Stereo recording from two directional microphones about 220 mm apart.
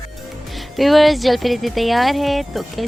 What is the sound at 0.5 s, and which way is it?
Speech, centre (ahead or behind).